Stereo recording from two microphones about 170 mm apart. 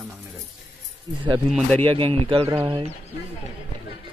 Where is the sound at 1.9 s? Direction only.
30° right (ahead or behind).